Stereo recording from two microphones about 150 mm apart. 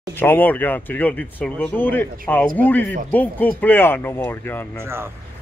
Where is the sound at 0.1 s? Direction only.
15° left (ahead or behind).